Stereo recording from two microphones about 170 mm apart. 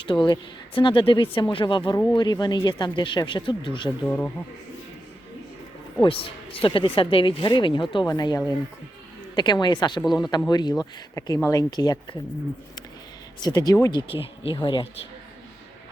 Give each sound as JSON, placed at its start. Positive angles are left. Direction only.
{"t": 0.0, "sound": "speech", "side_deg": 30}
{"t": 4.0, "sound": "speech", "side_deg": 10}
{"t": 6.0, "sound": "speech", "side_deg": 30}
{"t": 10.0, "sound": "speech", "side_deg": 0}
{"t": 10.5, "sound": "speech", "side_deg": 25}
{"t": 13.4, "sound": "speech", "side_deg": 25}
{"t": 14.1, "sound": "speech", "side_deg": 30}